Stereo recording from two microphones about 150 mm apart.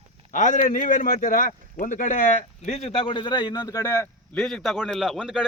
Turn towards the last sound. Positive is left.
turn(degrees=-5)  # may be behind; listen again after turning